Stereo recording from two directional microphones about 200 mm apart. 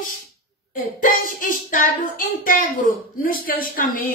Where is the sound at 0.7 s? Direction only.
40° left (ahead or behind).